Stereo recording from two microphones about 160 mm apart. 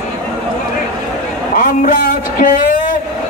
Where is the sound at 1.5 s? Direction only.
55° left (ahead or behind).